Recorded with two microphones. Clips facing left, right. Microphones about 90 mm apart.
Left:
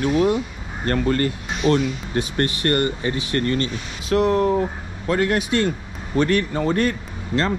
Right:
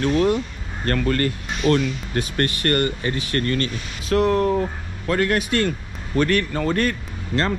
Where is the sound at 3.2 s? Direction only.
20° left (ahead or behind).